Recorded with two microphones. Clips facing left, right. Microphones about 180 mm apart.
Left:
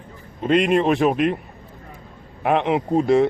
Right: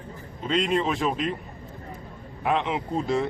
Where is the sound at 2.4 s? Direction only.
60° left (ahead or behind).